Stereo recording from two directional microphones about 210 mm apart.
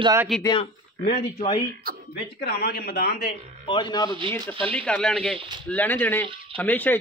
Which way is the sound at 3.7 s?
20° left (ahead or behind).